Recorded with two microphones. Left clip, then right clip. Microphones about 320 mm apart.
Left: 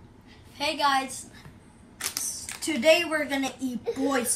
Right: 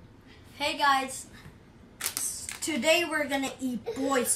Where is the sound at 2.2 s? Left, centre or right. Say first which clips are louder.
Left 2 dB; centre.